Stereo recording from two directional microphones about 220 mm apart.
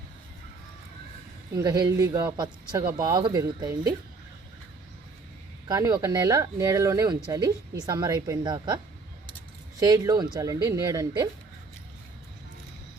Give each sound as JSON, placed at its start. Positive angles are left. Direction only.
{"t": 1.5, "sound": "speech", "side_deg": -15}
{"t": 5.6, "sound": "a woman's voice", "side_deg": -15}
{"t": 9.8, "sound": "speech", "side_deg": -15}